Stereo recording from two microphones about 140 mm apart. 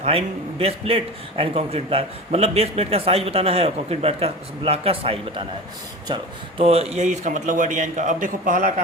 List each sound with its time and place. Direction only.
0.0 s a man's voice: 45° right (ahead or behind)
6.6 s speech: 45° right (ahead or behind); by 8.7 s 70° right (ahead or behind)